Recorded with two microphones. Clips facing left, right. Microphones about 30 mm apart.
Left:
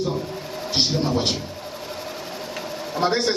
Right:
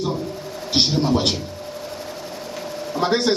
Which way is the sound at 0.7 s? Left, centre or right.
Right.